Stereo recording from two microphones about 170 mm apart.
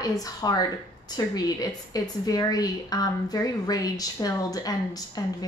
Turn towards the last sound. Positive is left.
turn(degrees=20)  # may be behind; listen again after turning